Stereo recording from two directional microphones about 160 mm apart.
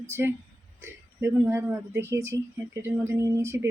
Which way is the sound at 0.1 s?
15° right (ahead or behind).